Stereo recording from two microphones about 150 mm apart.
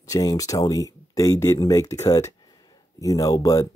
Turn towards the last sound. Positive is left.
turn(degrees=20)  # may be behind; listen again after turning